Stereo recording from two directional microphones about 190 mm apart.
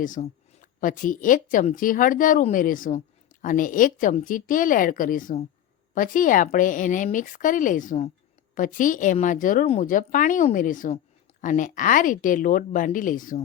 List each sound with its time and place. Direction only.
0.0 s a woman's voice: 45° left (ahead or behind)